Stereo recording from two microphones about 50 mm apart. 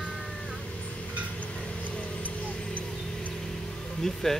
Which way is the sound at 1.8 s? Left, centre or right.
Left.